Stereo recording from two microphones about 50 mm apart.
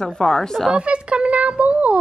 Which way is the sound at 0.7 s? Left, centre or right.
Right.